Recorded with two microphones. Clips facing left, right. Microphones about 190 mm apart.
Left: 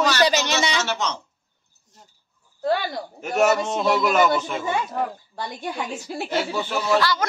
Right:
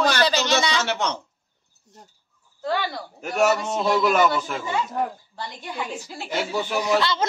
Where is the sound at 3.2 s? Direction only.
Centre (ahead or behind).